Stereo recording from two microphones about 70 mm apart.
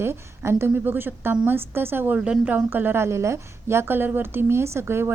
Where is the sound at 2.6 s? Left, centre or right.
Right.